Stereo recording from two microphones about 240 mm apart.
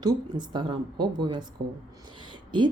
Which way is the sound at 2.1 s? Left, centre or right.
Centre.